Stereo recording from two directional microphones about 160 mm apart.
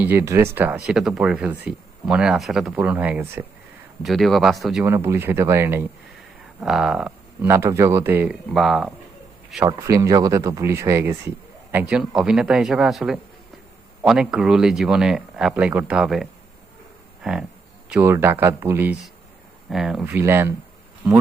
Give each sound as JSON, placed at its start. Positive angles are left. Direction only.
{"t": 0.0, "sound": "speech", "side_deg": -15}
{"t": 4.0, "sound": "speech", "side_deg": 0}
{"t": 4.8, "sound": "speech", "side_deg": -15}
{"t": 6.6, "sound": "speech", "side_deg": 0}
{"t": 7.4, "sound": "speech", "side_deg": -15}
{"t": 8.5, "sound": "speech", "side_deg": 0}
{"t": 9.6, "sound": "speech", "side_deg": -20}
{"t": 17.2, "sound": "speech", "side_deg": 0}
{"t": 17.9, "sound": "speech", "side_deg": -15}
{"t": 19.7, "sound": "speech", "side_deg": -5}
{"t": 20.1, "sound": "speech", "side_deg": -15}